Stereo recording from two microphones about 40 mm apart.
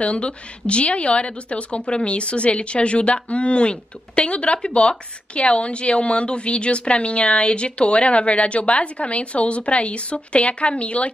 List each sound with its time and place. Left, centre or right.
0.0 s a woman's voice: left